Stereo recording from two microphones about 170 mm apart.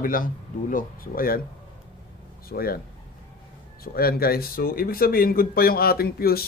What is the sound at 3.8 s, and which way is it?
Speech, 60° left (ahead or behind).